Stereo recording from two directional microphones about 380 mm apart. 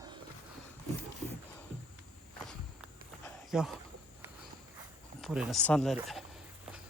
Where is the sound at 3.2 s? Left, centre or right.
Centre.